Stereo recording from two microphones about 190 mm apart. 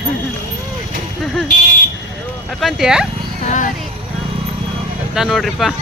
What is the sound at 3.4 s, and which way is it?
Speech, 40° left (ahead or behind).